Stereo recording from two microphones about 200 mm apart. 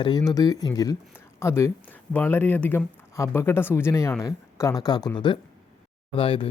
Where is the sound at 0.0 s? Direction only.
20° left (ahead or behind).